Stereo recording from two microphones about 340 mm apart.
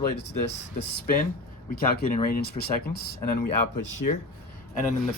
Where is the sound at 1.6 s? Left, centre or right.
Left.